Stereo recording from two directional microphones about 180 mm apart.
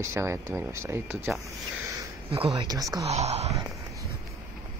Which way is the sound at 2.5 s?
20° right (ahead or behind).